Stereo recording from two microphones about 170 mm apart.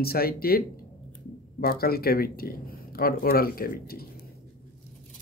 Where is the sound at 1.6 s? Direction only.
65° left (ahead or behind).